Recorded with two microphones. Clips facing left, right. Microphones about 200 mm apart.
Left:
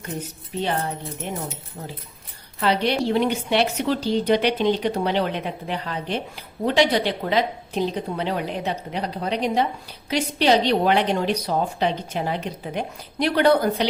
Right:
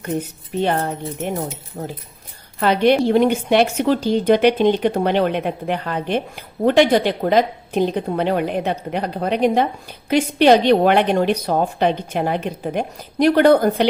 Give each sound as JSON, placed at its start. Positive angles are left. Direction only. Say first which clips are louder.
{"t": 0.6, "sound": "a woman's voice", "louder": "right 5 dB", "side_deg": -50}